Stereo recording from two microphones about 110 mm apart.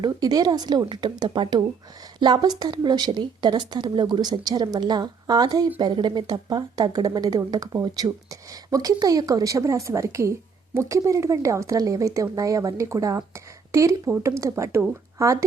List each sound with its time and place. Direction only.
0.0 s speech: 35° right (ahead or behind)